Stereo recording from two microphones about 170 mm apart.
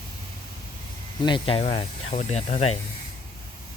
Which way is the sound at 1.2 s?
30° left (ahead or behind).